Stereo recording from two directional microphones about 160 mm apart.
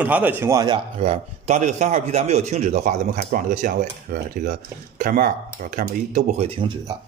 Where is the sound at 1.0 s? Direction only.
45° right (ahead or behind).